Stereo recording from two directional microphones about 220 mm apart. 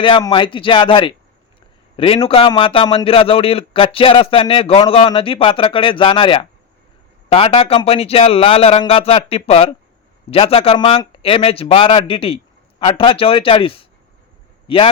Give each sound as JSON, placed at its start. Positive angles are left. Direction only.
{"t": 0.0, "sound": "a man's voice", "side_deg": 20}